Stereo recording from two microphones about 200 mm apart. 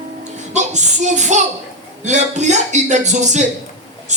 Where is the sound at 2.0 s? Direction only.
35° right (ahead or behind).